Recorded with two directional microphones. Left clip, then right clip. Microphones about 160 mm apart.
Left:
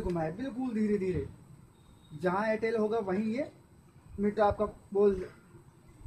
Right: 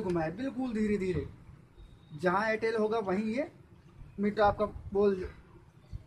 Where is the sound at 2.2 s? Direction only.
20° right (ahead or behind).